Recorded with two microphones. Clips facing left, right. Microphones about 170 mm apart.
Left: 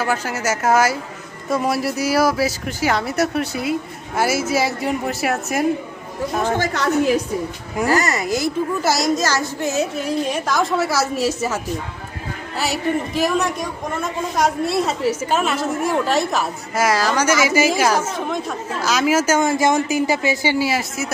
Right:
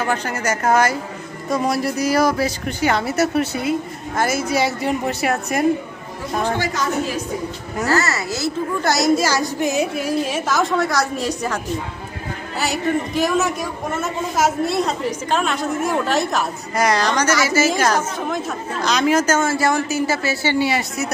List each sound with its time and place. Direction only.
0.0 s a man's voice: 5° left (ahead or behind)
7.8 s a woman's voice: 15° left (ahead or behind)
8.8 s a man's voice: centre (ahead or behind)
20.6 s a man's voice: centre (ahead or behind)